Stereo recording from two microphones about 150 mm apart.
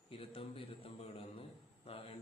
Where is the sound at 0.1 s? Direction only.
40° left (ahead or behind).